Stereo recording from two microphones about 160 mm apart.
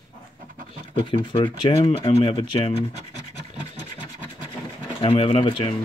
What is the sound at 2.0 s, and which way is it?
Speech, 35° left (ahead or behind).